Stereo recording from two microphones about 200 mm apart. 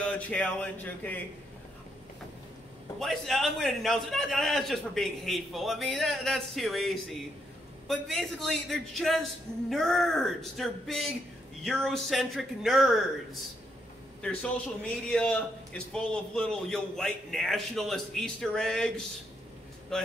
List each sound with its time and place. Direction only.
0.0 s speech: 5° left (ahead or behind)
3.0 s a man's voice: centre (ahead or behind)
19.9 s a man's voice: centre (ahead or behind)